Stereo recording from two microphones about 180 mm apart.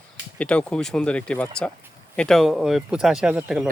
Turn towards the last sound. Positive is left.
turn(degrees=-5)  # may be behind; listen again after turning